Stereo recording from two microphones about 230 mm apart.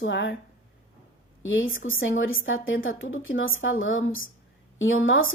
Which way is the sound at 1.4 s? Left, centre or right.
Left.